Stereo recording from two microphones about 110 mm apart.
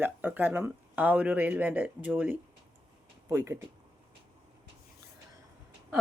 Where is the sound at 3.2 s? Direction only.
25° right (ahead or behind).